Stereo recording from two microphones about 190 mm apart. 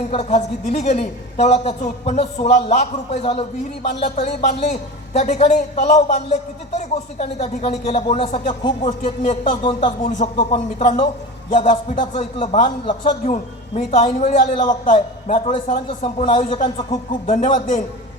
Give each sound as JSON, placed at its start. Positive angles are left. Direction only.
{"t": 0.1, "sound": "a man's voice", "side_deg": 30}
{"t": 10.3, "sound": "speech", "side_deg": 25}
{"t": 13.3, "sound": "a man's voice", "side_deg": 35}
{"t": 17.2, "sound": "a man's voice", "side_deg": 45}